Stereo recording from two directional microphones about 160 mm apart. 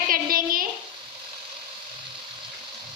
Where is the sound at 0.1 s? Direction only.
65° right (ahead or behind).